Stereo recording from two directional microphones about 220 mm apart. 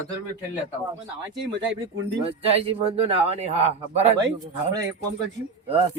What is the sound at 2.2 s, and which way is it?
Speech, 25° right (ahead or behind).